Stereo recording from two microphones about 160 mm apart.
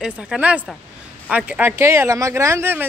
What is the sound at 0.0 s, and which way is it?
Speech, 5° right (ahead or behind).